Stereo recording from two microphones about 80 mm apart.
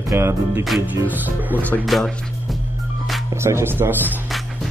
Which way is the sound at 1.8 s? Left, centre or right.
Centre.